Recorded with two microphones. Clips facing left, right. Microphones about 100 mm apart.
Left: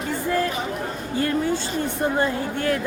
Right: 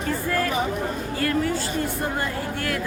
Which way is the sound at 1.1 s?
25° left (ahead or behind).